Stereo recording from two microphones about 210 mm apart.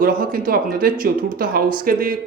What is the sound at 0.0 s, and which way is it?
Speech, 40° right (ahead or behind).